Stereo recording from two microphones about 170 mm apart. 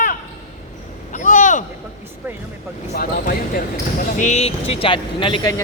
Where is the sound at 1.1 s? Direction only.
50° left (ahead or behind).